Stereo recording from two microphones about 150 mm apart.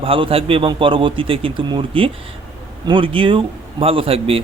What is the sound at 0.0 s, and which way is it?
Speech, 40° right (ahead or behind).